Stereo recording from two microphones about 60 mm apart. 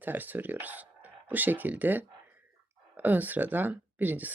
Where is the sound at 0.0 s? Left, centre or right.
Right.